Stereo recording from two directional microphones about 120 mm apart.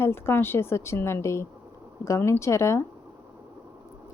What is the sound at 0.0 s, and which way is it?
A woman's voice, 20° left (ahead or behind).